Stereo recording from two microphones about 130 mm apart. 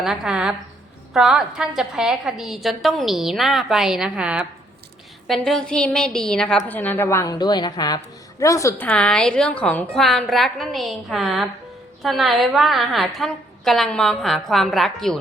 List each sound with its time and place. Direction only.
0.0 s a woman's voice: centre (ahead or behind)
5.3 s a woman's voice: 5° left (ahead or behind); by 8.7 s 25° left (ahead or behind)
8.7 s a woman's voice: 10° left (ahead or behind)